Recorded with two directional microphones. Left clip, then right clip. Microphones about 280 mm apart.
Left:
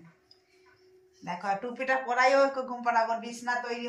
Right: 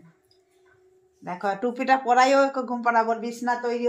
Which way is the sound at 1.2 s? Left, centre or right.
Right.